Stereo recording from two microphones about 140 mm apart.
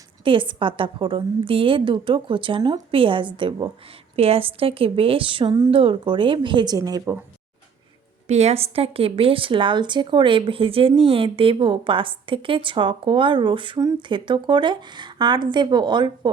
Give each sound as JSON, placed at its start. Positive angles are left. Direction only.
{"t": 0.3, "sound": "speech", "side_deg": -35}
{"t": 8.3, "sound": "speech", "side_deg": -50}